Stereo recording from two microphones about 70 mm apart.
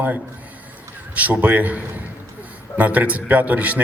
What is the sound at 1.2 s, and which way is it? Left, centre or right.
Speech, right.